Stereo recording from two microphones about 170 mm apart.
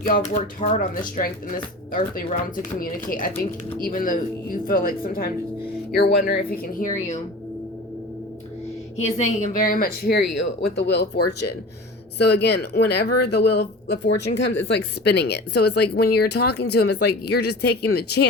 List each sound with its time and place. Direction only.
0.0 s a woman's voice: 55° left (ahead or behind)
3.8 s a woman's voice: 55° left (ahead or behind)
5.9 s a woman's voice: 70° left (ahead or behind)
9.0 s a woman's voice: 40° left (ahead or behind); by 18.3 s 70° left (ahead or behind)